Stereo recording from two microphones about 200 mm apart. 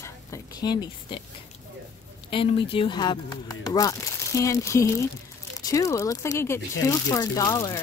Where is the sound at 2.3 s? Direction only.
25° left (ahead or behind).